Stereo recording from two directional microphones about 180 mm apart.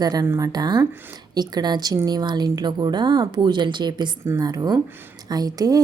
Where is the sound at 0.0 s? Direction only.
20° right (ahead or behind).